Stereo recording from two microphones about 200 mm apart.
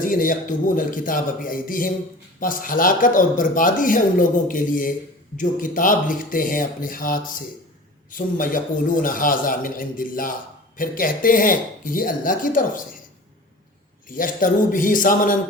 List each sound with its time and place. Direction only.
0.0 s speech: 45° left (ahead or behind)
14.1 s speech: 45° left (ahead or behind)